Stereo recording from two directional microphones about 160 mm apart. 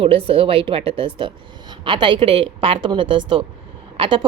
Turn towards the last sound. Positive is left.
turn(degrees=-30)  # may be behind; listen again after turning